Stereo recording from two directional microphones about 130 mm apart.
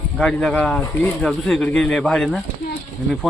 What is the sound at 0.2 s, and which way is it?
Speech, 5° left (ahead or behind).